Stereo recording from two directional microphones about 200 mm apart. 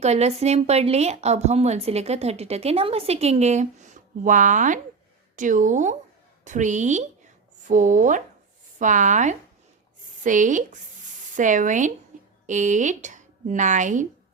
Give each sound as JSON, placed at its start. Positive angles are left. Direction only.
{"t": 0.0, "sound": "a woman's voice", "side_deg": -35}
{"t": 12.1, "sound": "a sound", "side_deg": -40}
{"t": 12.5, "sound": "a woman's voice", "side_deg": -35}